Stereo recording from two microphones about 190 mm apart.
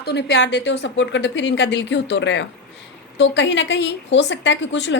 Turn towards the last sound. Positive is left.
turn(degrees=70)  # may be behind; listen again after turning